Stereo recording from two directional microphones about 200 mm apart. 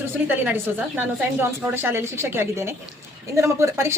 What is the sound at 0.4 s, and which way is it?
A woman's voice, 10° right (ahead or behind).